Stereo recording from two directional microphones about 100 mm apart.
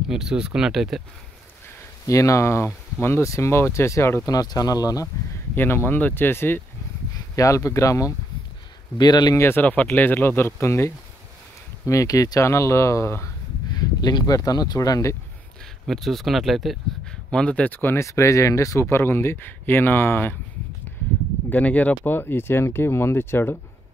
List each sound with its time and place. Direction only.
0.1 s speech: 5° right (ahead or behind)
2.0 s speech: 30° left (ahead or behind)
5.0 s speech: 20° left (ahead or behind)
7.3 s speech: 30° left (ahead or behind)
8.9 s speech: 45° left (ahead or behind)
9.4 s speech: 20° left (ahead or behind)
13.7 s speech: 40° left (ahead or behind)
15.9 s speech: centre (ahead or behind); by 20.3 s 20° left (ahead or behind)
21.5 s speech: 15° left (ahead or behind)